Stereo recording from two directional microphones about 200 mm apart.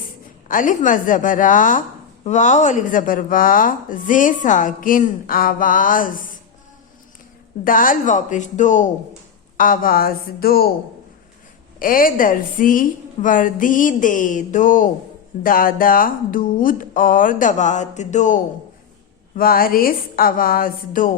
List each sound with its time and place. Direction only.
0.4 s a woman's voice: 40° left (ahead or behind)
7.6 s a woman's voice: 45° left (ahead or behind)
11.8 s a woman's voice: 45° left (ahead or behind)
19.4 s a woman's voice: 45° left (ahead or behind)